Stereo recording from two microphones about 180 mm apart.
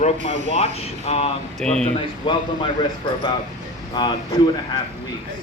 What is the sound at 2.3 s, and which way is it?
Speech, 30° left (ahead or behind).